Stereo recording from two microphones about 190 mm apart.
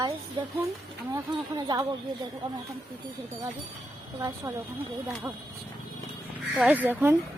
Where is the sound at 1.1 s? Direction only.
20° right (ahead or behind).